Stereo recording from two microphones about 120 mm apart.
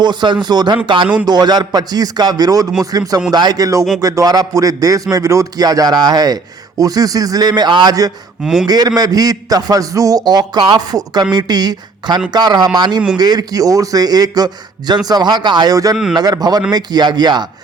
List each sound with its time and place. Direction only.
0.0 s a man's voice: 35° right (ahead or behind)